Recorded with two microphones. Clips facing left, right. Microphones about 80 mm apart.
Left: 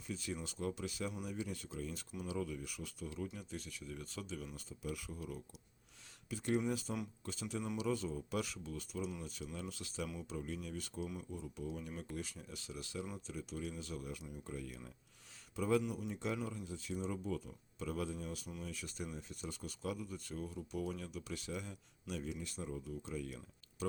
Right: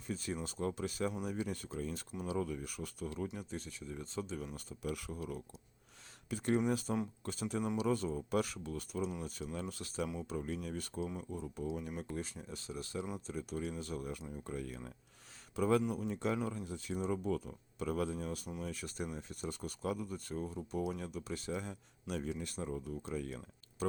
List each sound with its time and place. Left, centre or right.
0.1 s speech: right
3.3 s speech: right
4.5 s speech: right
10.0 s speech: right
10.2 s speech: right
11.0 s speech: right
11.3 s speech: right
12.1 s speech: right
14.7 s speech: right
15.5 s speech: right
15.8 s speech: right
16.0 s speech: right